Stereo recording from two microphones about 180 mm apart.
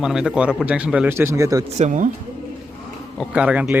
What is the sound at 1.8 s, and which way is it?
Speech, 45° right (ahead or behind).